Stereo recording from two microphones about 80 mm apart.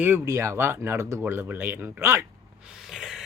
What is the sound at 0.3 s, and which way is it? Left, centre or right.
Speech, right.